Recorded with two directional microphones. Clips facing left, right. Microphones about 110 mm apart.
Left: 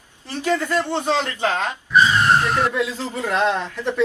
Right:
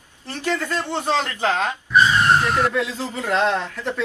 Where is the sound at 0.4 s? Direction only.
15° left (ahead or behind).